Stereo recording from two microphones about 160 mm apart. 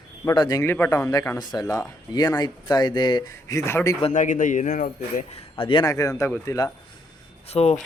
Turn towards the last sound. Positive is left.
turn(degrees=40)  # may be behind; listen again after turning